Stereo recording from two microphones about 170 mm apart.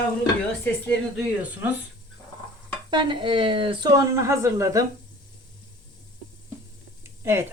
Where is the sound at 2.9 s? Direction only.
30° right (ahead or behind).